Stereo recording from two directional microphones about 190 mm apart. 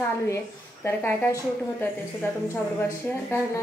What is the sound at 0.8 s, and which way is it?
A woman's voice, 10° left (ahead or behind).